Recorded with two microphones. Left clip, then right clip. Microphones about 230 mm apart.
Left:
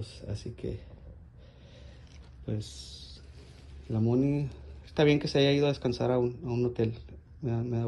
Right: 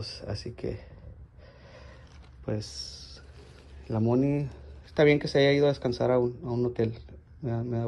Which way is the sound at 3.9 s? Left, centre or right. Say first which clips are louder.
Right 2 dB; centre.